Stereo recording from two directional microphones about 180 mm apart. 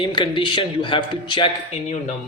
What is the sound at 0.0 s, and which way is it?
A man's voice, 25° left (ahead or behind).